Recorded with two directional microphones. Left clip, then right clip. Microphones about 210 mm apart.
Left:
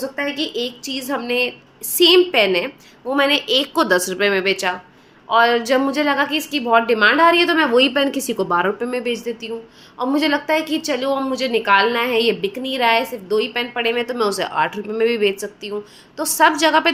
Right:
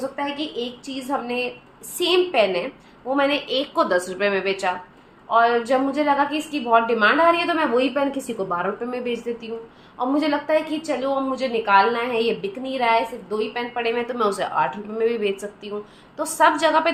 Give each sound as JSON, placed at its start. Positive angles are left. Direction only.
{"t": 0.2, "sound": "a woman's voice", "side_deg": 35}